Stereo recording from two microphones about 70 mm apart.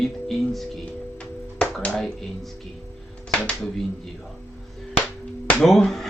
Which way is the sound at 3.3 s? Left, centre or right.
Centre.